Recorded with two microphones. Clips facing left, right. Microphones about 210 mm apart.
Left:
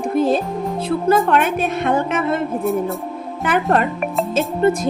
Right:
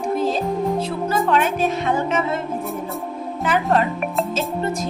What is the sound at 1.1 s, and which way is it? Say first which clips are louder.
A woman's voice: left 4 dB; 60° left (ahead or behind).